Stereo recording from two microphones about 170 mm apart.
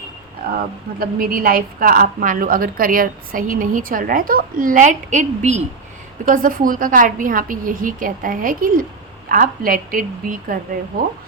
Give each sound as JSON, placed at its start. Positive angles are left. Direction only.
{"t": 0.9, "sound": "a woman's voice", "side_deg": -60}